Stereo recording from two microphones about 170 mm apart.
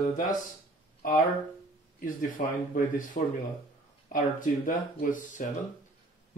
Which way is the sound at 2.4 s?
55° left (ahead or behind).